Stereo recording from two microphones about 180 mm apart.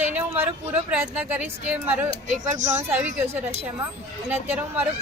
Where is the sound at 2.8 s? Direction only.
10° right (ahead or behind).